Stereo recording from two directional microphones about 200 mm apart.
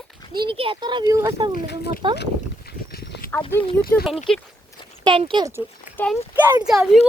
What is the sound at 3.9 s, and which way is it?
Speech, 10° left (ahead or behind).